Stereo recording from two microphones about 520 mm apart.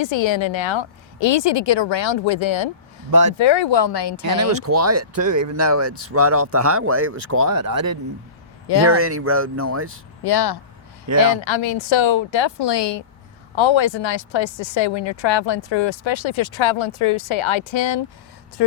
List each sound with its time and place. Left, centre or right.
0.0 s speech: left
4.4 s speech: right
7.3 s speech: right
8.6 s speech: left
9.0 s speech: right
10.2 s speech: left
11.3 s speech: left